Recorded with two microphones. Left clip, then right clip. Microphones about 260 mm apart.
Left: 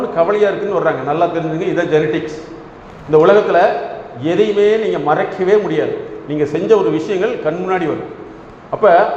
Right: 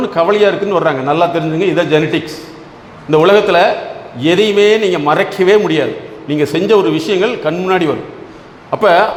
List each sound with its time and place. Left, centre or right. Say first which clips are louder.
0.2 s a man's voice: right 3 dB; right